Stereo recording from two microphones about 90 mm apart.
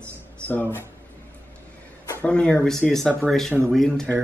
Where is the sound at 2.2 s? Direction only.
10° left (ahead or behind).